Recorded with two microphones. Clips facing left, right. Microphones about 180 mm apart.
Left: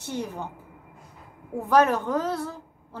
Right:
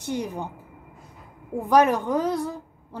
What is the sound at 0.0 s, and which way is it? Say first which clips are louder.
Speech: right 3 dB; 15° right (ahead or behind).